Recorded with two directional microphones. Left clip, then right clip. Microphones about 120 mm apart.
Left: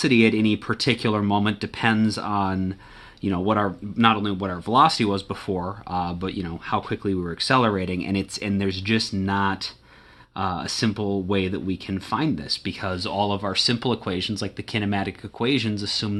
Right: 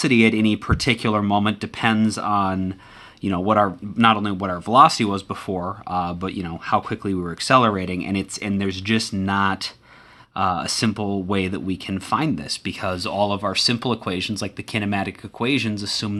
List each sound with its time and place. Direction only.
0.0 s speech: 25° right (ahead or behind)
3.2 s speech: 30° right (ahead or behind)